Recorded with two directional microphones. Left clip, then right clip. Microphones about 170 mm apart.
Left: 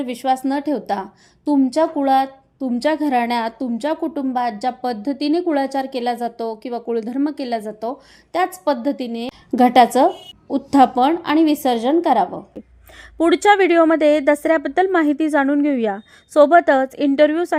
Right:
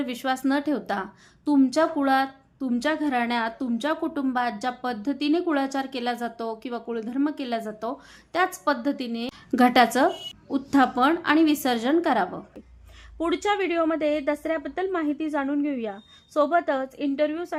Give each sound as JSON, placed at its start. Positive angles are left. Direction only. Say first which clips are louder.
{"t": 0.0, "sound": "a woman's voice", "louder": "left 7 dB", "side_deg": 15}
{"t": 13.1, "sound": "a woman's voice", "louder": "left 11 dB", "side_deg": 40}